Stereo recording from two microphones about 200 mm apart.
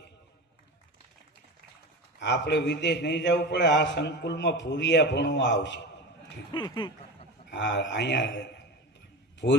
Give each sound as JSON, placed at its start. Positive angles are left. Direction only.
{"t": 2.2, "sound": "a man's voice", "side_deg": 60}
{"t": 6.5, "sound": "speech", "side_deg": 20}
{"t": 7.5, "sound": "a man's voice", "side_deg": 60}